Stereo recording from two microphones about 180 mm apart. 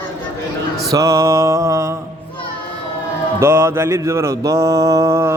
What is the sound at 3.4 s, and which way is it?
Mantra, 15° right (ahead or behind).